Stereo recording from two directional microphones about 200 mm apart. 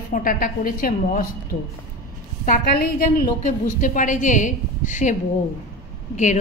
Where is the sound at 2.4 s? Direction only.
45° left (ahead or behind).